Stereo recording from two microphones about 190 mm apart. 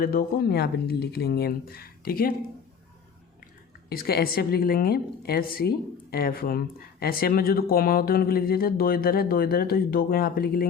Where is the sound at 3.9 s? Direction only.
50° left (ahead or behind).